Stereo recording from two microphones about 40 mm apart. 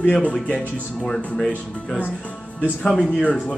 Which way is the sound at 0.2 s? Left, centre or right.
Left.